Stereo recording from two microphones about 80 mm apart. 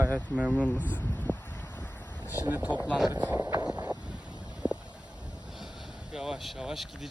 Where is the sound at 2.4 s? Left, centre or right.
Right.